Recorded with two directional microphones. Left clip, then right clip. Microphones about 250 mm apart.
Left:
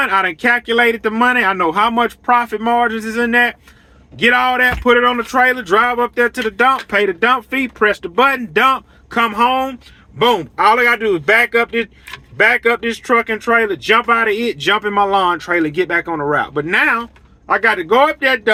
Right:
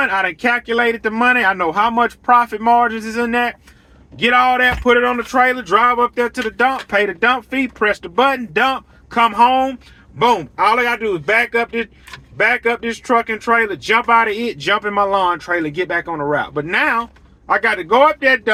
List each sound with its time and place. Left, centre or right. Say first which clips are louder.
0.0 s speech: left 2 dB; centre